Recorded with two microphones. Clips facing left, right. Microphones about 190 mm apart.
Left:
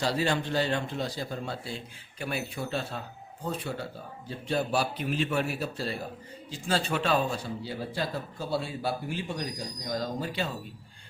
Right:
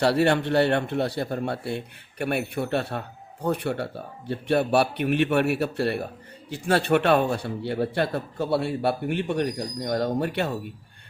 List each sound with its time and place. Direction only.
0.0 s a man's voice: 65° right (ahead or behind)